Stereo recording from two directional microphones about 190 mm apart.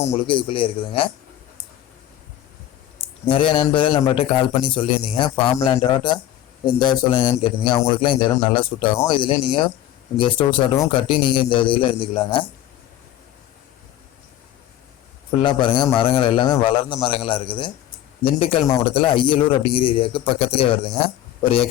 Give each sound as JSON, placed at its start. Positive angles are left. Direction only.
{"t": 0.3, "sound": "speech", "side_deg": 25}
{"t": 3.2, "sound": "speech", "side_deg": 30}
{"t": 15.4, "sound": "speech", "side_deg": 25}